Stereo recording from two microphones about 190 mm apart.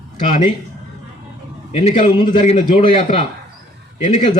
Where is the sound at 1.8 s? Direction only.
30° left (ahead or behind).